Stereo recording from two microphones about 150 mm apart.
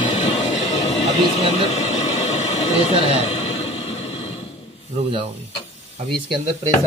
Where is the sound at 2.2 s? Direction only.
45° left (ahead or behind).